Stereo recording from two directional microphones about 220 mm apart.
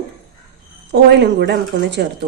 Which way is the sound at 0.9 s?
50° right (ahead or behind).